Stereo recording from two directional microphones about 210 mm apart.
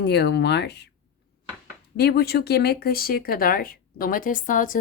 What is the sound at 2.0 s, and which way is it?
Speech, 50° left (ahead or behind).